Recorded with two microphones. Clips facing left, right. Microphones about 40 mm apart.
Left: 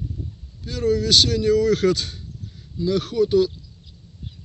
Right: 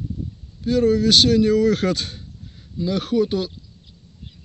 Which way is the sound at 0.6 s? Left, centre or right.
Right.